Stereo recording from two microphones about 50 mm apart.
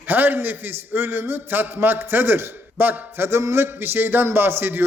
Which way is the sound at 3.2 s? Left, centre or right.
Right.